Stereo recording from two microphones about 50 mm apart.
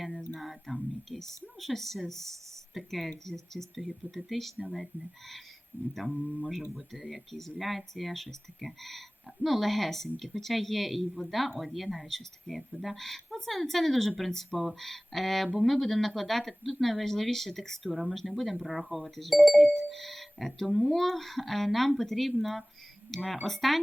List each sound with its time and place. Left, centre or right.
0.3 s speech: centre
5.7 s speech: right
6.5 s speech: centre